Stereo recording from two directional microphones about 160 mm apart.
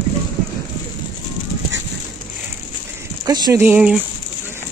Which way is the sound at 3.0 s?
25° right (ahead or behind).